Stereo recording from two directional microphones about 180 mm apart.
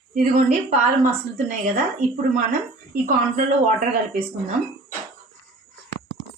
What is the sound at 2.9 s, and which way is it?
A woman's voice, 50° right (ahead or behind).